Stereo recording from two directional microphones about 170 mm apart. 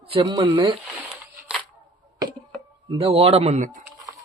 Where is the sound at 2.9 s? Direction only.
35° right (ahead or behind).